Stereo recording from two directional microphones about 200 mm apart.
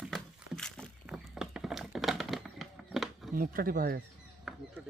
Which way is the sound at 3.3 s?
45° right (ahead or behind).